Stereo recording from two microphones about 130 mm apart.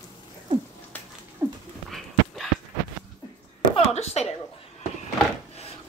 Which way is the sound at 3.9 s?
55° left (ahead or behind).